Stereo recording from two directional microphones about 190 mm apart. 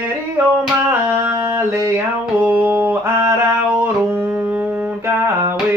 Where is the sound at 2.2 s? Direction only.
10° right (ahead or behind).